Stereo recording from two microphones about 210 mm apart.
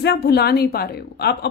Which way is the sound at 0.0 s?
50° left (ahead or behind).